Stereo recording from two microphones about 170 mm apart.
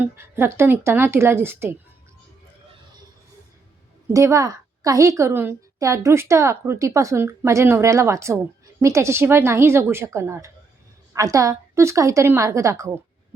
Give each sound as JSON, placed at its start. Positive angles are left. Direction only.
{"t": 0.0, "sound": "a woman's voice", "side_deg": -15}
{"t": 4.1, "sound": "a woman's voice", "side_deg": -20}